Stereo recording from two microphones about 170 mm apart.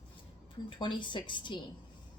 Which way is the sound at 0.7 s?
30° left (ahead or behind).